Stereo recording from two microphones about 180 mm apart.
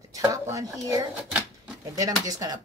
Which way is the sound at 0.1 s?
20° right (ahead or behind).